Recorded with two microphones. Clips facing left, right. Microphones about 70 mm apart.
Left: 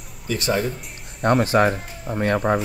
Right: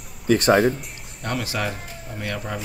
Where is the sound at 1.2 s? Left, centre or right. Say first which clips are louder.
Left 10 dB; left.